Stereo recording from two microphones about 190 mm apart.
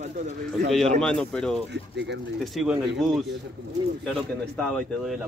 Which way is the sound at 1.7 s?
65° right (ahead or behind).